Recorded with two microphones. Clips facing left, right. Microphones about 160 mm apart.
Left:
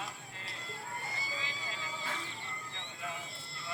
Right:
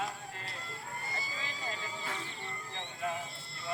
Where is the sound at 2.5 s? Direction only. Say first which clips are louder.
Right 4 dB; 35° right (ahead or behind).